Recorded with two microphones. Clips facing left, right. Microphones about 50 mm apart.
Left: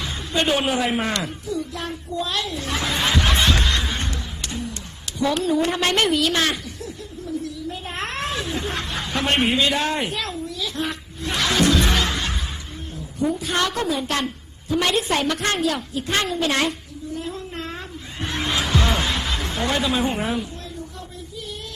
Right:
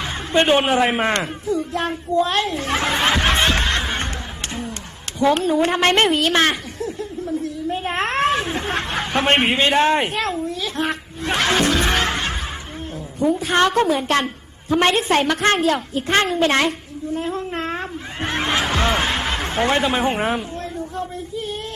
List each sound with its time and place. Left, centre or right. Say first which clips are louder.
0.0 s a woman's voice: right 5 dB; right